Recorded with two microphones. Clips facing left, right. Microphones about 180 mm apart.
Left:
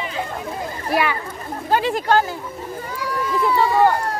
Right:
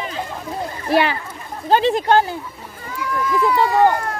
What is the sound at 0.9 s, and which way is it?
Speech, 30° right (ahead or behind).